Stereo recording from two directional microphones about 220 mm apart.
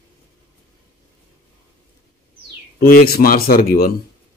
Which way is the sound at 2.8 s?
40° left (ahead or behind).